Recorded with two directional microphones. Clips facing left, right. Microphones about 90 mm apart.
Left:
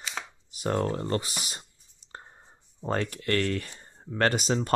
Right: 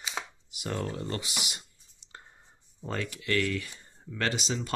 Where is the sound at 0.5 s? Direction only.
40° left (ahead or behind).